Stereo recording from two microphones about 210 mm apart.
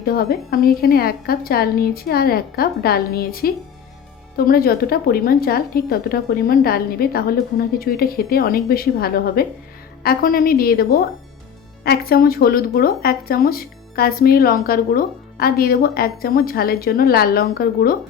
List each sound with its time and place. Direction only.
0.0 s speech: 45° left (ahead or behind)